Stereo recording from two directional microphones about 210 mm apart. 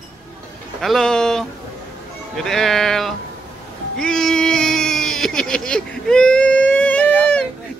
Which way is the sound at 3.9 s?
5° left (ahead or behind).